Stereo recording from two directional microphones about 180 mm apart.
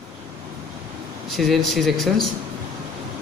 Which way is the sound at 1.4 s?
Centre (ahead or behind).